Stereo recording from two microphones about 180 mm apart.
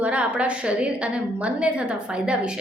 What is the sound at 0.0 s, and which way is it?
A woman's voice, 5° right (ahead or behind).